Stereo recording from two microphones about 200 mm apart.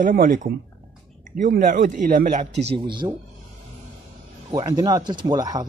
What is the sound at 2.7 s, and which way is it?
Speech, 25° right (ahead or behind).